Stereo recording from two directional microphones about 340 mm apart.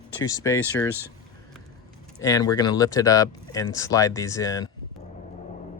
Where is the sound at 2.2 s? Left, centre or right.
Centre.